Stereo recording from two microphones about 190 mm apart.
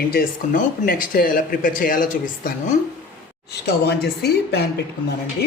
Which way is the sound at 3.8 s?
60° left (ahead or behind).